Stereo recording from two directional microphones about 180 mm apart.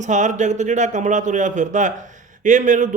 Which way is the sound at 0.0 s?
40° right (ahead or behind).